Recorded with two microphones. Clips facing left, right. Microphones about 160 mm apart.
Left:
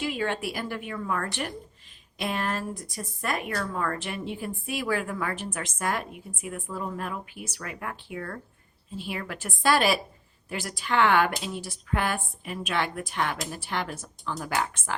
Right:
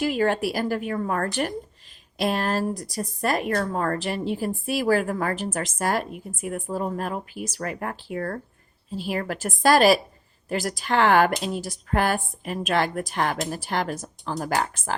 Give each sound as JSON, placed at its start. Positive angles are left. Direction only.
{"t": 0.0, "sound": "speech", "side_deg": -40}